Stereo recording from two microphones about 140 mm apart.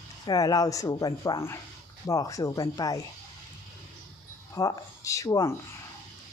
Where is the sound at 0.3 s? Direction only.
25° left (ahead or behind).